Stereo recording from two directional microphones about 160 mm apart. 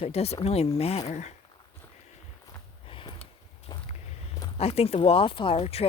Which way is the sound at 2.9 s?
35° left (ahead or behind).